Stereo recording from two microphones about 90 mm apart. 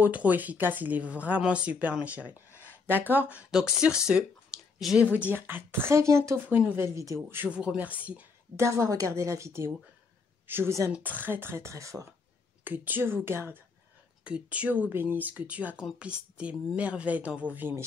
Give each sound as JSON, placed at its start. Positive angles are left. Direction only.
{"t": 0.0, "sound": "speech", "side_deg": -20}
{"t": 2.3, "sound": "a sound", "side_deg": 30}
{"t": 3.1, "sound": "speech", "side_deg": -15}
{"t": 5.1, "sound": "a woman's voice", "side_deg": -20}
{"t": 7.4, "sound": "speech", "side_deg": -15}
{"t": 8.5, "sound": "a woman's voice", "side_deg": -35}
{"t": 12.6, "sound": "speech", "side_deg": -20}
{"t": 14.2, "sound": "speech", "side_deg": -15}